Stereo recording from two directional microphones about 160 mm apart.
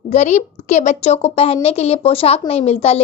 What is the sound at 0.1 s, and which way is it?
A woman's voice, 45° left (ahead or behind).